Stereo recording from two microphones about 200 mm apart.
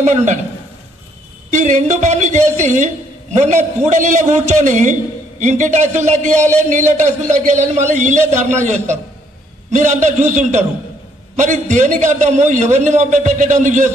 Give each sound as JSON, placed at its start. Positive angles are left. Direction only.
{"t": 0.0, "sound": "a man's voice", "side_deg": -35}
{"t": 1.5, "sound": "a man's voice", "side_deg": -35}